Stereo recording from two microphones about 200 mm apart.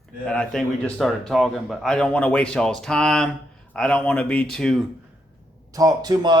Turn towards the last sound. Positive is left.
turn(degrees=-20)  # may be behind; listen again after turning